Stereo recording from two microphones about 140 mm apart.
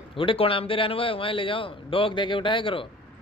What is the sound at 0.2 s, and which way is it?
A man's voice, 40° left (ahead or behind).